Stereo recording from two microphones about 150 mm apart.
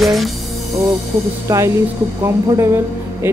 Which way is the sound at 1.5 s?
20° right (ahead or behind).